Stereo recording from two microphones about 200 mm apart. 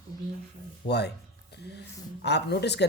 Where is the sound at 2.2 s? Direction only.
55° left (ahead or behind).